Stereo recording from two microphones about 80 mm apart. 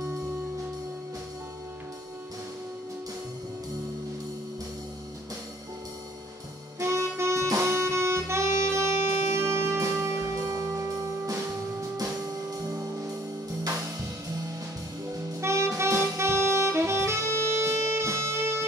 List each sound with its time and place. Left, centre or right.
6.8 s harmonica: right
11.3 s music: right
15.4 s saxophone: right